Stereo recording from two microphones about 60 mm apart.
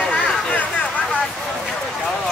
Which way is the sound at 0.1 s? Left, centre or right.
Left.